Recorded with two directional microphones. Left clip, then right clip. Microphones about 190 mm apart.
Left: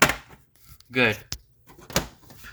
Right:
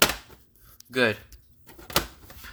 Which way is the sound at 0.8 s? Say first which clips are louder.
Left 2 dB; 15° right (ahead or behind).